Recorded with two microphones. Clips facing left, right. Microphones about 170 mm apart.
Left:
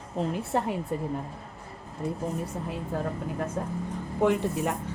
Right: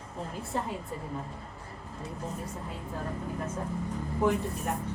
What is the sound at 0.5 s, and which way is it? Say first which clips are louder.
Speech: left 5 dB; 70° left (ahead or behind).